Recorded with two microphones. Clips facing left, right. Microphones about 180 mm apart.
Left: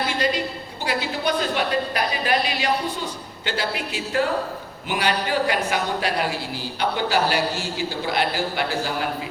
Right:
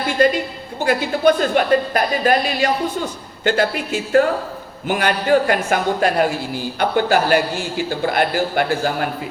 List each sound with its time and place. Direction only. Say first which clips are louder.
0.2 s a man's voice: right 7 dB; 55° right (ahead or behind)